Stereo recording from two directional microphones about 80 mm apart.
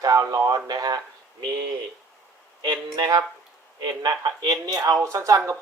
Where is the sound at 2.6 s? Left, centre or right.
Right.